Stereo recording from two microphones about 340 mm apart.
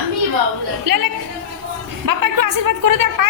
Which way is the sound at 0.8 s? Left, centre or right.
Right.